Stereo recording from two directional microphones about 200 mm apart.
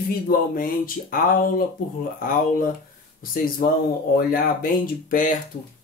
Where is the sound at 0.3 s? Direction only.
45° left (ahead or behind).